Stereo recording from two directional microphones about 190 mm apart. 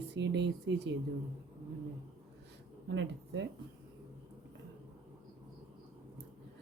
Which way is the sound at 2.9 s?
70° right (ahead or behind).